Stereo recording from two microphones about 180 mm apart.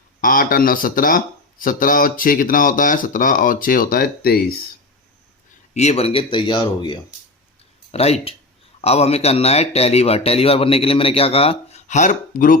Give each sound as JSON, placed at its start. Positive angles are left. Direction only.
{"t": 0.2, "sound": "speech", "side_deg": 50}
{"t": 5.7, "sound": "a man's voice", "side_deg": 35}